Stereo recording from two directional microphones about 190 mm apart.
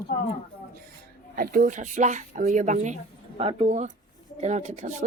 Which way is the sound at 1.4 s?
45° right (ahead or behind).